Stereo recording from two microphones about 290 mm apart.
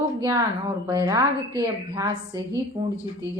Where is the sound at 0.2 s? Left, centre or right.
Centre.